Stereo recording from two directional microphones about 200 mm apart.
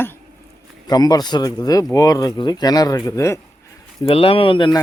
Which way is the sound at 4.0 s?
25° left (ahead or behind).